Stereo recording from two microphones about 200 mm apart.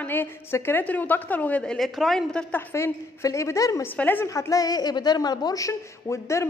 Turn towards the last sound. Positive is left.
turn(degrees=15)  # may be behind; listen again after turning